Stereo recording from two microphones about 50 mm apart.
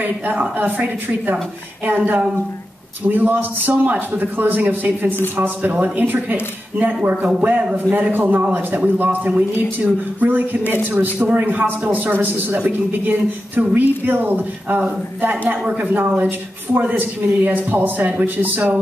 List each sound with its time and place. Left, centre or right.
0.0 s a man's voice: right
7.7 s a man's voice: right
11.1 s a man's voice: right
11.4 s a man's voice: right